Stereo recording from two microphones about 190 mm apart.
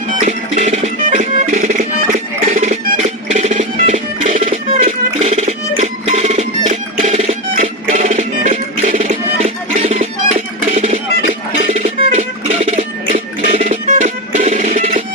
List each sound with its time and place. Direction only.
0.2 s music: 35° right (ahead or behind)